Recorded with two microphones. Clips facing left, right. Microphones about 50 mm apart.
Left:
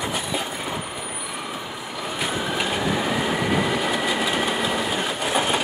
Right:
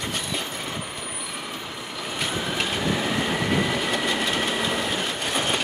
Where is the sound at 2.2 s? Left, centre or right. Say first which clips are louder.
Left 2 dB; centre.